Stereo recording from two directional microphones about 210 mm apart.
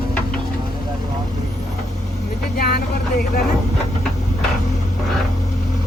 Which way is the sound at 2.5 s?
45° left (ahead or behind).